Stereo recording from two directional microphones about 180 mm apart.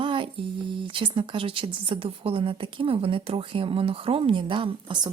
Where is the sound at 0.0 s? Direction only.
30° right (ahead or behind).